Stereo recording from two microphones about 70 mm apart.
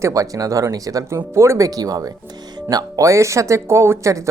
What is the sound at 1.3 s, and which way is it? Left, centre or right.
Speech, right.